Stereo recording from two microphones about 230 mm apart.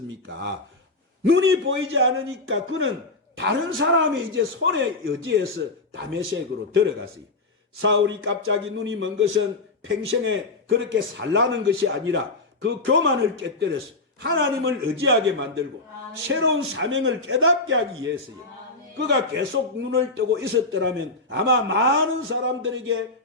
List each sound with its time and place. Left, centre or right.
1.2 s a man's voice: right
7.8 s a man's voice: right
18.9 s a man's voice: right